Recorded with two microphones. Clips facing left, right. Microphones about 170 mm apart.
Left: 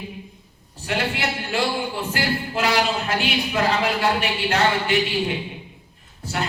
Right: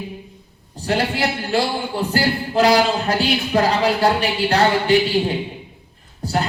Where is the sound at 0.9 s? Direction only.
35° right (ahead or behind).